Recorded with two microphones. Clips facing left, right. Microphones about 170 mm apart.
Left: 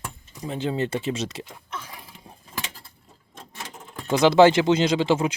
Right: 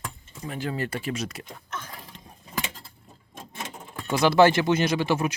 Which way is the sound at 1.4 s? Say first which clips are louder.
Even; 10° left (ahead or behind).